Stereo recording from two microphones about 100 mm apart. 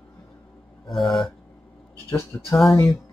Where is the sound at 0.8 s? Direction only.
Centre (ahead or behind).